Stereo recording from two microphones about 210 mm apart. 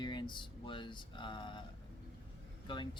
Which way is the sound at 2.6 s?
25° left (ahead or behind).